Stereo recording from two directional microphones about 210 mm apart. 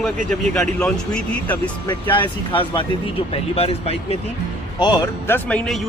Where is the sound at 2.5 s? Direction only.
25° left (ahead or behind).